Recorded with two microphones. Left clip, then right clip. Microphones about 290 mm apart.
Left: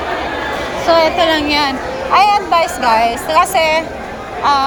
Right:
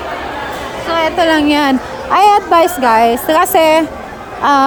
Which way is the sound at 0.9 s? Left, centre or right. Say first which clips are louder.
Left 1 dB; centre.